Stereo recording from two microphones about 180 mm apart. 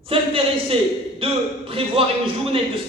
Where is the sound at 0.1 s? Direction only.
30° right (ahead or behind).